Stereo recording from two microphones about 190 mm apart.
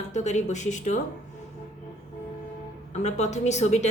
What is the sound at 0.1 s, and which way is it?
Speech, 40° left (ahead or behind).